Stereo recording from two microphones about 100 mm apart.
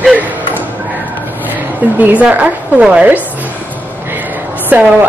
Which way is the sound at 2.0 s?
15° right (ahead or behind).